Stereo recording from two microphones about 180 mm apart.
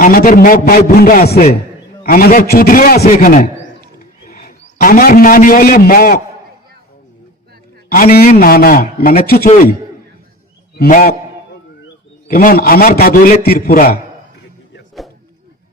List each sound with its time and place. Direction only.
0.0 s a man's voice: 50° left (ahead or behind)
2.0 s a man's voice: 50° left (ahead or behind)
8.3 s a man's voice: 55° left (ahead or behind)
10.8 s a man's voice: 50° left (ahead or behind)
12.3 s a man's voice: 50° left (ahead or behind)